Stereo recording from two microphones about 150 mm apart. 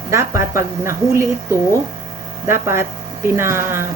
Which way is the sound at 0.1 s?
20° right (ahead or behind).